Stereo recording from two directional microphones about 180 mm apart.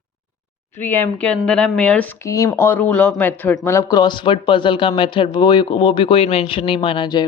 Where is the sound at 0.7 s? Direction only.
10° left (ahead or behind).